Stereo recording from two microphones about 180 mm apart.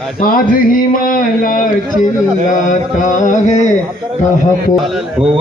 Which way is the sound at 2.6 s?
45° left (ahead or behind).